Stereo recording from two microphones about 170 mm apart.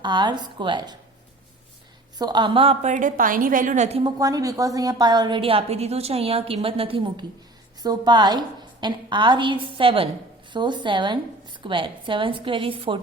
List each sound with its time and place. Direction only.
0.0 s a woman's voice: 25° right (ahead or behind)
2.1 s a woman's voice: 25° right (ahead or behind); by 4.0 s 40° right (ahead or behind)
4.0 s a woman's voice: 20° right (ahead or behind)